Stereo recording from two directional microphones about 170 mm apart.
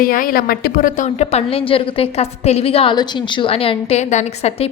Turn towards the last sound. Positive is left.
turn(degrees=40)  # may be behind; listen again after turning